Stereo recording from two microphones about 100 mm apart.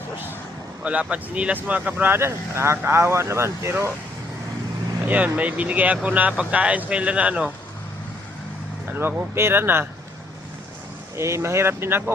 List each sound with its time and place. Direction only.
0.9 s speech: 10° right (ahead or behind)
5.0 s speech: 15° right (ahead or behind)
8.9 s speech: 20° right (ahead or behind)
11.2 s speech: 30° right (ahead or behind)